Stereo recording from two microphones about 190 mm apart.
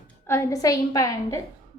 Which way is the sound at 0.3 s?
15° left (ahead or behind).